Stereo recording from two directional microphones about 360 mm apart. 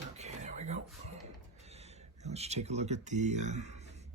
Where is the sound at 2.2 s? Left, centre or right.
Centre.